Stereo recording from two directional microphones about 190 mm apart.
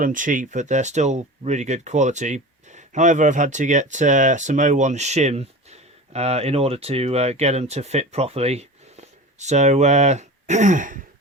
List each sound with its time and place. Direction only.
0.0 s speech: 45° right (ahead or behind)